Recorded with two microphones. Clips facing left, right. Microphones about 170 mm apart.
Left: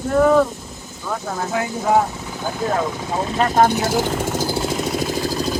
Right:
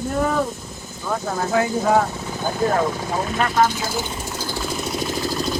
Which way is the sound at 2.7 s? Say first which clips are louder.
Right 1 dB; 25° left (ahead or behind).